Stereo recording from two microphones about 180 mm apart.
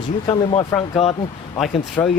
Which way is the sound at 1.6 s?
5° left (ahead or behind).